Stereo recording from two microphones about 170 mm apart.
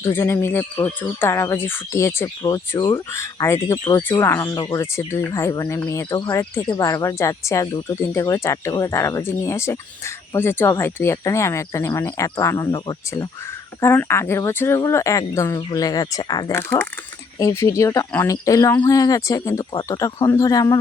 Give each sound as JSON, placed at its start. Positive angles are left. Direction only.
{"t": 0.0, "sound": "speech", "side_deg": 15}